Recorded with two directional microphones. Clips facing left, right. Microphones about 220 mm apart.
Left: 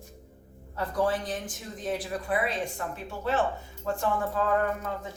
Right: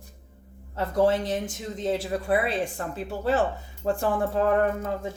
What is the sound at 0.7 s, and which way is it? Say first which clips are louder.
Speech: right 5 dB; 25° right (ahead or behind).